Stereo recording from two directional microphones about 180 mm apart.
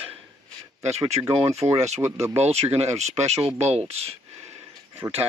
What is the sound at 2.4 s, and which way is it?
Speech, 35° right (ahead or behind).